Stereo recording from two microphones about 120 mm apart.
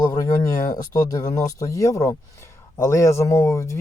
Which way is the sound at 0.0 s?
35° left (ahead or behind).